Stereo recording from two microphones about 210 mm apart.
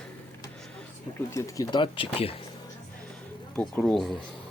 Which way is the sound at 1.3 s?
15° left (ahead or behind).